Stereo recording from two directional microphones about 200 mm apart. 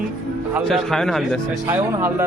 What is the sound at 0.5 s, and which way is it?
Speech, centre (ahead or behind).